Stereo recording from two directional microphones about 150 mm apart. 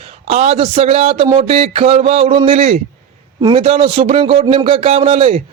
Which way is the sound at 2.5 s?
45° right (ahead or behind).